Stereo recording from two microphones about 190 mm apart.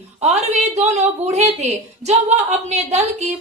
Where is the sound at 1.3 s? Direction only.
35° right (ahead or behind).